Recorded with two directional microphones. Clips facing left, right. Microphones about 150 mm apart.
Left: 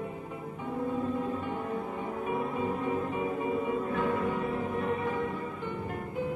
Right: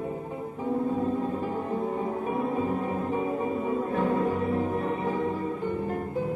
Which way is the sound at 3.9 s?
35° right (ahead or behind).